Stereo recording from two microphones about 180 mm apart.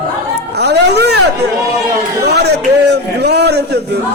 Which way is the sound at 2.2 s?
65° right (ahead or behind).